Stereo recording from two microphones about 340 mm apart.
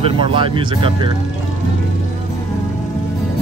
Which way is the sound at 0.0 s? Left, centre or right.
Centre.